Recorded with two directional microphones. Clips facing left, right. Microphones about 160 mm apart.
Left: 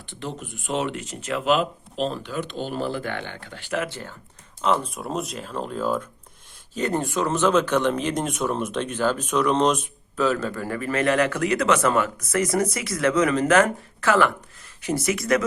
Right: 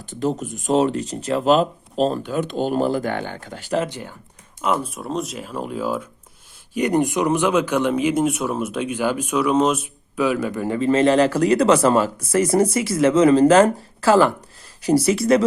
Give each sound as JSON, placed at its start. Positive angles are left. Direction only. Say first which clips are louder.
{"t": 0.0, "sound": "speech", "louder": "right 10 dB", "side_deg": -45}
{"t": 3.8, "sound": "speech", "louder": "right 3 dB", "side_deg": -15}